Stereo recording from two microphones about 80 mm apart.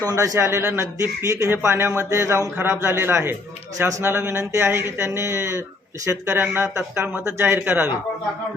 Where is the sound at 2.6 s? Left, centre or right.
Right.